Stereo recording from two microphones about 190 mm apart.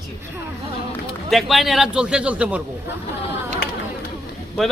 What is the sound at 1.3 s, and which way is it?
A man's voice, centre (ahead or behind).